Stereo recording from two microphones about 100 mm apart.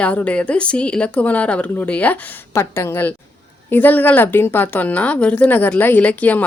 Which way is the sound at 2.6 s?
25° left (ahead or behind).